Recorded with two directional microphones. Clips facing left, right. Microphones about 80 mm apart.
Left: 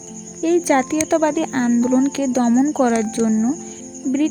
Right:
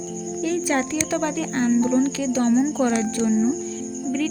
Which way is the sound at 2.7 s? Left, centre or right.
Left.